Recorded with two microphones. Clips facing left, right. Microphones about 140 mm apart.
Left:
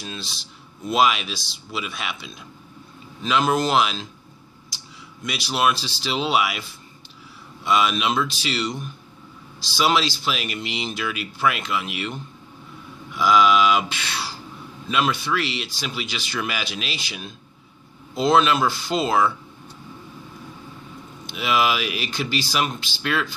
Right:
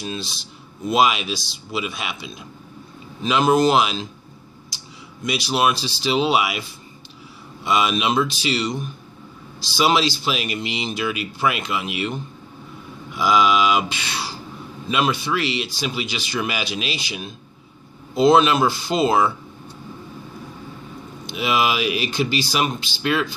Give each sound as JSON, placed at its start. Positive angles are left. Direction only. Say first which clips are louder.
{"t": 0.0, "sound": "speech", "louder": "right 5 dB", "side_deg": -15}
{"t": 5.2, "sound": "speech", "louder": "right 2 dB", "side_deg": -15}
{"t": 7.6, "sound": "speech", "louder": "right 1 dB", "side_deg": -15}
{"t": 21.4, "sound": "speech", "louder": "right 1 dB", "side_deg": -20}